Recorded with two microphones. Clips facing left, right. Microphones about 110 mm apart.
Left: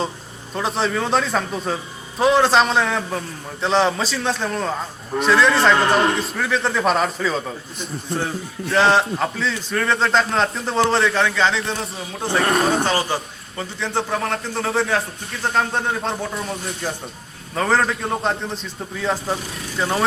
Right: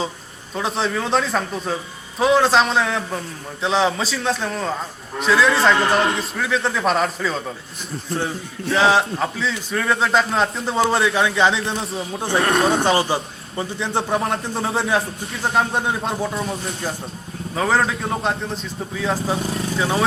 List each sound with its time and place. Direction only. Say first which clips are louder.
0.5 s a man's voice: left 1 dB; centre (ahead or behind); by 11.8 s 15° right (ahead or behind)
12.4 s a man's voice: right 1 dB; centre (ahead or behind)
12.7 s a man's voice: right 2 dB; 20° right (ahead or behind); by 20.1 s 5° right (ahead or behind)